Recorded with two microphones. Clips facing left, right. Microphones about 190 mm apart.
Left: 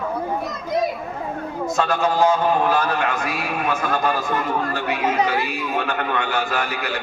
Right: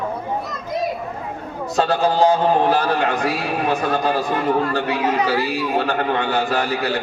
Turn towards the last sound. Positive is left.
turn(degrees=-35)  # may be behind; listen again after turning